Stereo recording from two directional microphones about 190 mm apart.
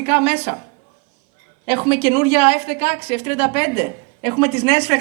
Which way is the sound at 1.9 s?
30° left (ahead or behind).